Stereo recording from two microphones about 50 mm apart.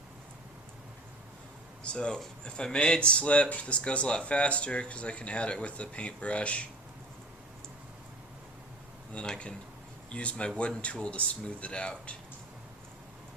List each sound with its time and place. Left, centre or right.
1.8 s speech: left
9.1 s speech: centre